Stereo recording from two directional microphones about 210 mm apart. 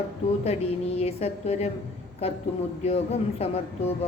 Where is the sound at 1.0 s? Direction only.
30° left (ahead or behind).